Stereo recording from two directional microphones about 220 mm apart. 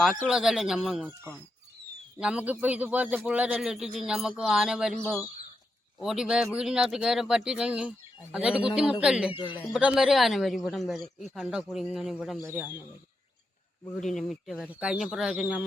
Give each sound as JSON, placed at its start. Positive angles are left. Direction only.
{"t": 0.0, "sound": "speech", "side_deg": 0}
{"t": 2.1, "sound": "speech", "side_deg": -5}
{"t": 6.0, "sound": "speech", "side_deg": -5}
{"t": 9.3, "sound": "speech", "side_deg": 20}
{"t": 9.7, "sound": "speech", "side_deg": -5}
{"t": 14.0, "sound": "speech", "side_deg": 0}